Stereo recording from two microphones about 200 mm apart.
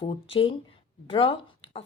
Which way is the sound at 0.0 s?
25° left (ahead or behind).